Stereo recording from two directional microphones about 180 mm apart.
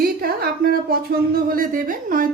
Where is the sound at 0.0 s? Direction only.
60° right (ahead or behind).